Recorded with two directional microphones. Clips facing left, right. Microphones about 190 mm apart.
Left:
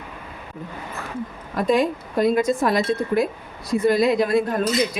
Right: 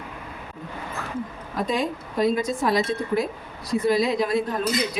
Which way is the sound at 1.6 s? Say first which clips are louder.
Left 7 dB; 55° left (ahead or behind).